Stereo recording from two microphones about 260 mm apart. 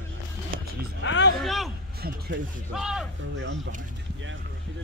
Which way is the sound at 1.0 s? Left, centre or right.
Left.